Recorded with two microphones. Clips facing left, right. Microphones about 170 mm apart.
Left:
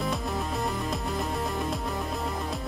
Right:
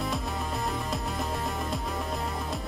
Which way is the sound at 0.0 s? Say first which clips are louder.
Left 2 dB; centre (ahead or behind).